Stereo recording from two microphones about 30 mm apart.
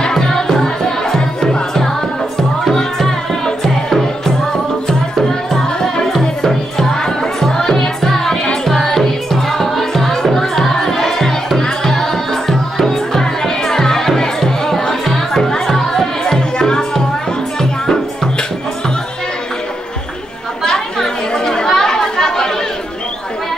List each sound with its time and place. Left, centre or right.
0.1 s music: centre
3.6 s music: centre
5.5 s music: centre
16.3 s music: left
20.6 s chatter: left